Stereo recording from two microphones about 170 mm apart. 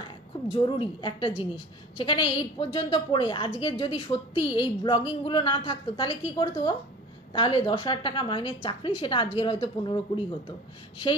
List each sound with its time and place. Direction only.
0.5 s a woman's voice: 30° left (ahead or behind)